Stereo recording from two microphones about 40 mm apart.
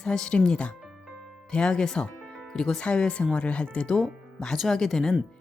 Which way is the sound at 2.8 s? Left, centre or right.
Left.